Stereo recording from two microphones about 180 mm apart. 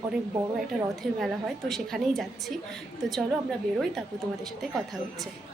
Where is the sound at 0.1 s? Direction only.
Centre (ahead or behind).